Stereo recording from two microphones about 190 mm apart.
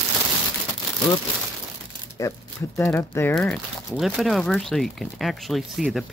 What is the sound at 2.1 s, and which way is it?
Speech, 15° left (ahead or behind).